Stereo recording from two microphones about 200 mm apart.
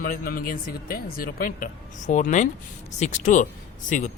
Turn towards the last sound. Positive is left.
turn(degrees=40)  # may be behind; listen again after turning